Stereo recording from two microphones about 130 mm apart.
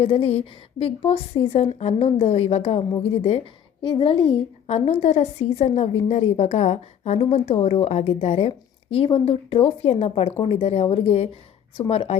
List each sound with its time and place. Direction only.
0.0 s a woman's voice: 50° left (ahead or behind)
3.8 s a woman's voice: 40° left (ahead or behind)